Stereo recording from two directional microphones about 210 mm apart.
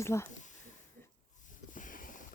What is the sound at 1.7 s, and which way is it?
Boat, 40° left (ahead or behind).